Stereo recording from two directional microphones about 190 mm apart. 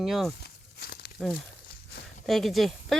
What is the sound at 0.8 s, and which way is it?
Crumpling, 55° left (ahead or behind).